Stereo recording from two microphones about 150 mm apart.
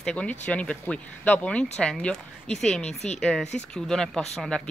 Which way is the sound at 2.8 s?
45° left (ahead or behind).